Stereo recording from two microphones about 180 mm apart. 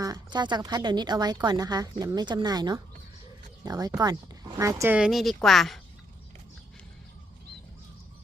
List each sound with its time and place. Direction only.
0.0 s speech: 20° right (ahead or behind)
4.9 s speech: centre (ahead or behind)